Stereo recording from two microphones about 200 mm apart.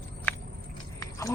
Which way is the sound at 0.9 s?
15° left (ahead or behind).